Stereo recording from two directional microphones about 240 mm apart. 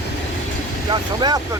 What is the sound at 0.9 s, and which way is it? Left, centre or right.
Vehicle, centre.